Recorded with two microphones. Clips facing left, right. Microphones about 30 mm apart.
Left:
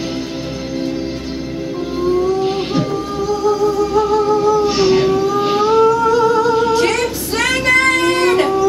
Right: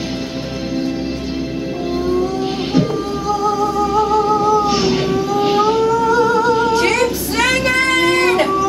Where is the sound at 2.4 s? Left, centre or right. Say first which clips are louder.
Even; centre.